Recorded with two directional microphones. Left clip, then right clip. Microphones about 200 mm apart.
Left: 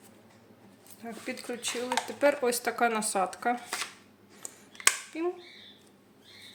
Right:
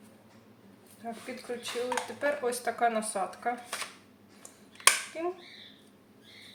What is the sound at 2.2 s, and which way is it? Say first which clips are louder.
Speech: left 6 dB; 50° left (ahead or behind).